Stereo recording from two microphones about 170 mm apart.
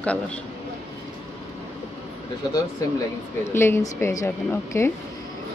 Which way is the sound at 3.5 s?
15° left (ahead or behind).